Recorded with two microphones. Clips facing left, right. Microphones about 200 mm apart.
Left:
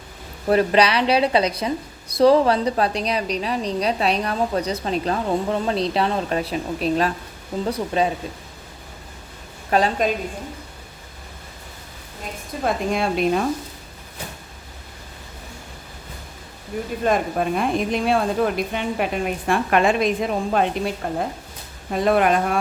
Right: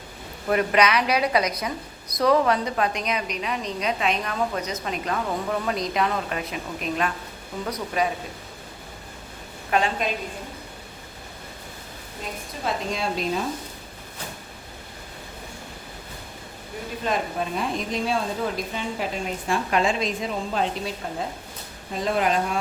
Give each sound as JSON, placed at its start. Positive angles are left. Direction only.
{"t": 0.4, "sound": "a woman's voice", "side_deg": 30}
{"t": 9.6, "sound": "a woman's voice", "side_deg": 35}
{"t": 12.6, "sound": "a woman's voice", "side_deg": 55}
{"t": 17.0, "sound": "a woman's voice", "side_deg": 55}